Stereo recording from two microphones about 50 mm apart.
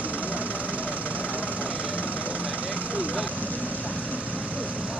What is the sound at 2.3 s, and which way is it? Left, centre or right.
Vehicle, left.